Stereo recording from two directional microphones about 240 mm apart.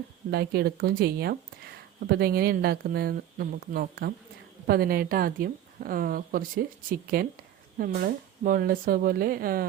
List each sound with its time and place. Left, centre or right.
0.3 s a woman's voice: right